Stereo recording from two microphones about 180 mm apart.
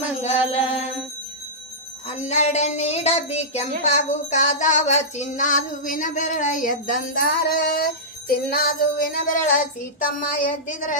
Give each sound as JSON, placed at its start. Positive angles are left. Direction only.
{"t": 0.0, "sound": "music", "side_deg": 35}
{"t": 2.0, "sound": "a woman's voice", "side_deg": 40}
{"t": 8.4, "sound": "music", "side_deg": 55}